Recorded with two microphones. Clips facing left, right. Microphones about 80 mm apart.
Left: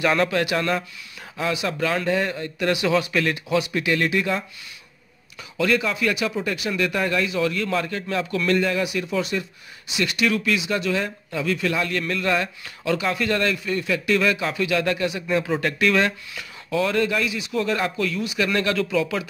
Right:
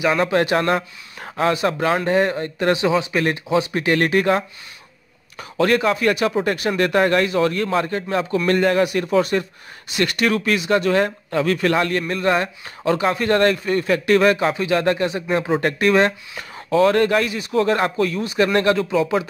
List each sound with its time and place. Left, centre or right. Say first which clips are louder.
0.0 s speech: right 2 dB; centre
0.3 s speech: right 5 dB; right
2.9 s speech: right 2 dB; right
3.9 s speech: right 6 dB; right
5.4 s speech: right 4 dB; right
8.5 s speech: right 5 dB; right
12.1 s speech: right 4 dB; right
14.5 s speech: right 4 dB; right